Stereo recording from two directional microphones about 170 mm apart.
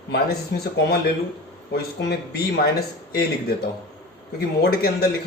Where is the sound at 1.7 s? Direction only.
70° left (ahead or behind).